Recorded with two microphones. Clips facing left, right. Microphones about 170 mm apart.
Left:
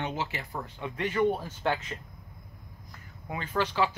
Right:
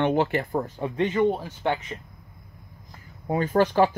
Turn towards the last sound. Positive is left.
turn(degrees=-50)  # may be behind; listen again after turning